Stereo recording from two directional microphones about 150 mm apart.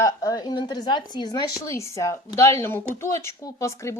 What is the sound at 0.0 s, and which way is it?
A woman's voice, 25° left (ahead or behind).